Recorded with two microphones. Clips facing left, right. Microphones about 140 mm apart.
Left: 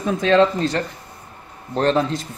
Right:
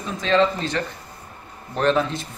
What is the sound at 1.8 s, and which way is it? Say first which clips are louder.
Speech: left 2 dB; 35° left (ahead or behind).